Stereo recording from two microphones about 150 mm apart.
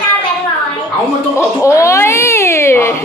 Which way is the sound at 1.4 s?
20° left (ahead or behind).